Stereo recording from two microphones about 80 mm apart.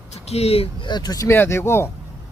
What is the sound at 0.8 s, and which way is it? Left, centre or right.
Speech, left.